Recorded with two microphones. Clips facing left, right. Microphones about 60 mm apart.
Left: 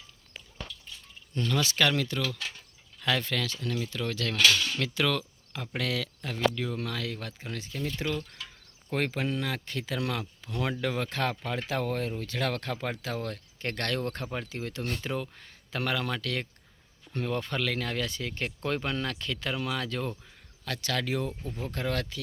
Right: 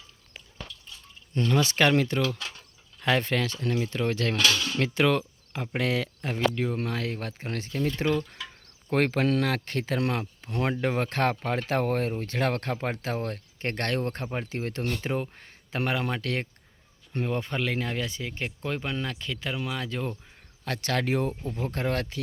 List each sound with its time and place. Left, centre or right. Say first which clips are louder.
1.3 s speech: right 4 dB; right; by 20.1 s centre
20.7 s speech: right 4 dB; right